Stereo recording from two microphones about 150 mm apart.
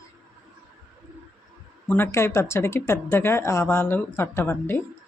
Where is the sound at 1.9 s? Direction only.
15° left (ahead or behind).